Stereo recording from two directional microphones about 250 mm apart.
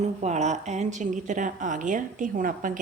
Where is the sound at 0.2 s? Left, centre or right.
Right.